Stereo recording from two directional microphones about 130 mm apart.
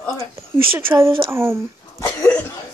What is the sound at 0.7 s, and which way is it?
Speech, 20° right (ahead or behind).